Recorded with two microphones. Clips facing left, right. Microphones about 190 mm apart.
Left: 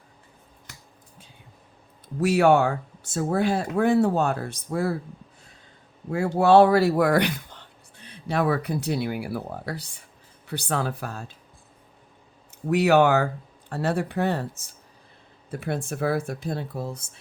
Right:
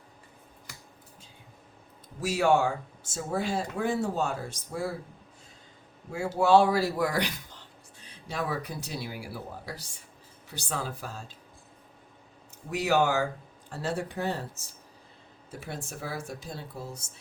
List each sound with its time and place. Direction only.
2.2 s speech: 60° left (ahead or behind)
6.1 s speech: 65° left (ahead or behind)
12.7 s speech: 65° left (ahead or behind)
15.4 s speech: 60° left (ahead or behind)